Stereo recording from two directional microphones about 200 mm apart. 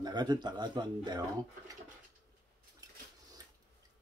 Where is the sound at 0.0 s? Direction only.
20° right (ahead or behind).